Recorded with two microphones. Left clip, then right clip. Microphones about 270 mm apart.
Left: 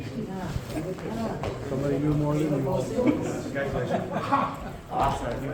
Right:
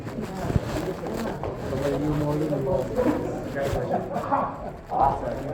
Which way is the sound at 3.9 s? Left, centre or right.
Left.